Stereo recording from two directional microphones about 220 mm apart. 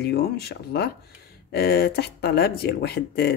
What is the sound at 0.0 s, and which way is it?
Speech, 45° left (ahead or behind).